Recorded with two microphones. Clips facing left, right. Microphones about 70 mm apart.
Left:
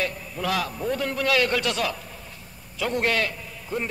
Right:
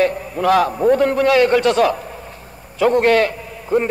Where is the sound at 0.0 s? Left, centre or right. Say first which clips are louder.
Right 11 dB; right.